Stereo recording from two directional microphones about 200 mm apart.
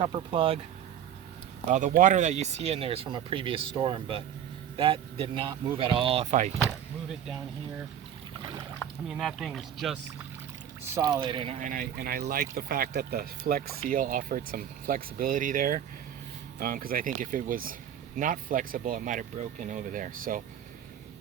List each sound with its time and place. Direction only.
0.0 s speech: 25° right (ahead or behind)
1.7 s speech: 40° right (ahead or behind)
6.6 s speech: centre (ahead or behind)
9.0 s speech: centre (ahead or behind)
10.9 s speech: 15° right (ahead or behind)
11.2 s speech: 25° right (ahead or behind); by 20.4 s 40° right (ahead or behind)